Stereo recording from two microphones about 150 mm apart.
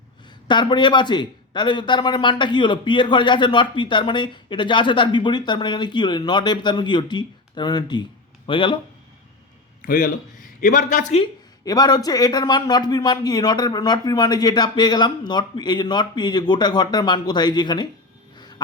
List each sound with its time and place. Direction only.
0.4 s speech: 30° left (ahead or behind)
9.8 s a man's voice: 60° left (ahead or behind)
11.6 s a man's voice: 25° left (ahead or behind)